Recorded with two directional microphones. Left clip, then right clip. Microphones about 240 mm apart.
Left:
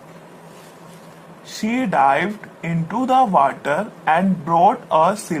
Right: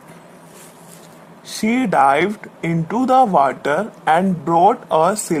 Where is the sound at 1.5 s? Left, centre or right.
Right.